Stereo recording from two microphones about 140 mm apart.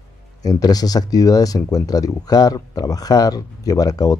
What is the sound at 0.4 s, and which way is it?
Speech, 25° left (ahead or behind).